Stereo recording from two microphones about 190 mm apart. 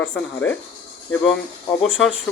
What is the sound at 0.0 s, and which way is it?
Speech, 10° left (ahead or behind).